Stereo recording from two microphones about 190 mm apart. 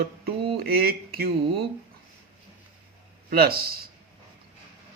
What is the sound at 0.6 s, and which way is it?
Speech, 55° right (ahead or behind).